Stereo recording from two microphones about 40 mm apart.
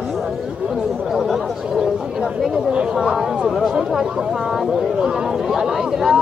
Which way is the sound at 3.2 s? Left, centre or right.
Centre.